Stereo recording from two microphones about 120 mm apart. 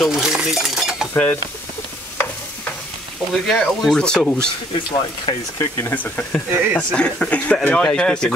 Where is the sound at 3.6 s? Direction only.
Centre (ahead or behind).